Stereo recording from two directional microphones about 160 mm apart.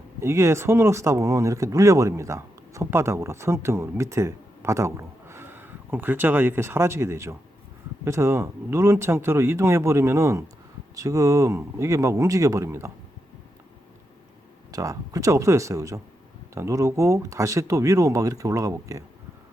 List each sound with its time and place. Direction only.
0.2 s speech: 15° right (ahead or behind)
14.7 s speech: 20° right (ahead or behind)